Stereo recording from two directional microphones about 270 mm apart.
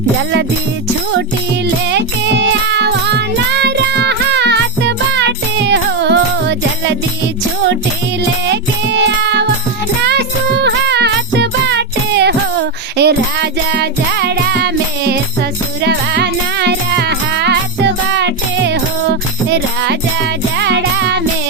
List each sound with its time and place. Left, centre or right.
1.9 s music: right
8.4 s music: right
19.5 s music: right